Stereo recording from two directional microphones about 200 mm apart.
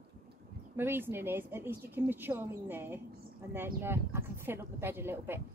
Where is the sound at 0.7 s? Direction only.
10° right (ahead or behind).